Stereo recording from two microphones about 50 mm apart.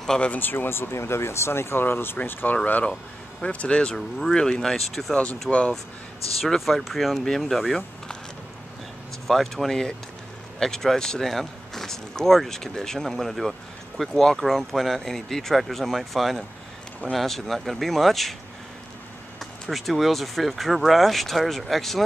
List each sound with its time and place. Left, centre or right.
0.0 s speech: centre
0.3 s speech: left
2.2 s speech: left
3.9 s speech: centre
9.3 s speech: centre
19.7 s speech: centre